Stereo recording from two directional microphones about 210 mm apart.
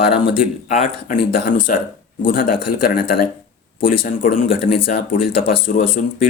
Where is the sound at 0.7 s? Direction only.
40° left (ahead or behind).